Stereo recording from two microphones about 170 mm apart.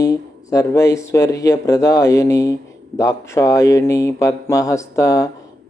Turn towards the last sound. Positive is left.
turn(degrees=20)  # may be behind; listen again after turning